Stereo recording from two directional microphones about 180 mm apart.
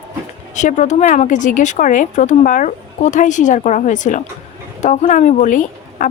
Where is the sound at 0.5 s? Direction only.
45° left (ahead or behind).